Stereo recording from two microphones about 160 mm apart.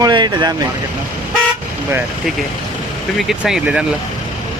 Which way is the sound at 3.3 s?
5° right (ahead or behind).